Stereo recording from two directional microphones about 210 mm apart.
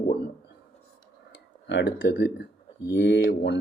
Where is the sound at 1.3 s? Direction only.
55° left (ahead or behind).